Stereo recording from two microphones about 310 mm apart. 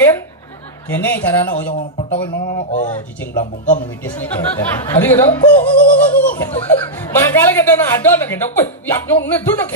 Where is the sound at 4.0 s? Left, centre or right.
Centre.